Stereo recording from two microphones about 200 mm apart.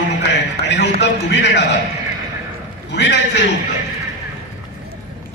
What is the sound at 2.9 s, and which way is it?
Speech, 60° left (ahead or behind).